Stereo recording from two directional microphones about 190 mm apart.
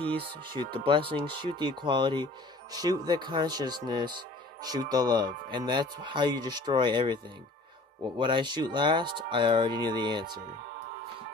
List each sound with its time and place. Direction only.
0.0 s speech: 30° right (ahead or behind)
8.2 s speech: 25° right (ahead or behind)